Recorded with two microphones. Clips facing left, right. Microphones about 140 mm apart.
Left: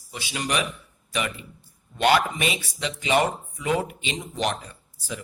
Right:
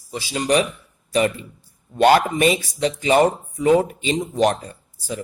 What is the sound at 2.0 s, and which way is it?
Speech, 40° right (ahead or behind).